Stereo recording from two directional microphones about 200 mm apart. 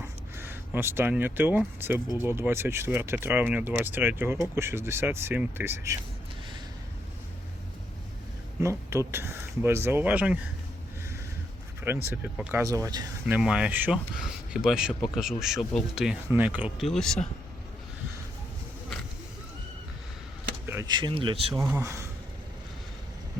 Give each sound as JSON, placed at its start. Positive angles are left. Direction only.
{"t": 0.3, "sound": "speech", "side_deg": -10}
{"t": 8.6, "sound": "speech", "side_deg": -15}
{"t": 11.9, "sound": "speech", "side_deg": -10}
{"t": 13.2, "sound": "speech", "side_deg": -5}
{"t": 20.7, "sound": "speech", "side_deg": -15}
{"t": 21.6, "sound": "speech", "side_deg": -15}